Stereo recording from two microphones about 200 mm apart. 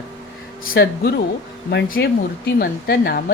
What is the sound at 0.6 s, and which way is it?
A woman's voice, 50° left (ahead or behind).